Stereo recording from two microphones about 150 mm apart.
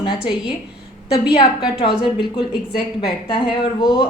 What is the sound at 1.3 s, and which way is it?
Speech, 35° left (ahead or behind).